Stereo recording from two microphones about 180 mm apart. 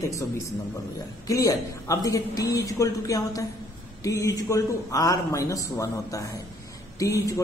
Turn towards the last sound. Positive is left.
turn(degrees=20)  # may be behind; listen again after turning